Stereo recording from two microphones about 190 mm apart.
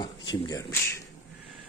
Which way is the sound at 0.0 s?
25° left (ahead or behind).